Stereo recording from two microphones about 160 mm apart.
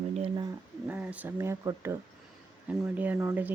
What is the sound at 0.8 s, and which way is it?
Speech, 10° right (ahead or behind).